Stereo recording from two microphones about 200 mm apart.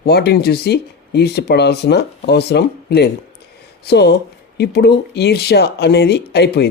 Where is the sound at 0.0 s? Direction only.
55° left (ahead or behind).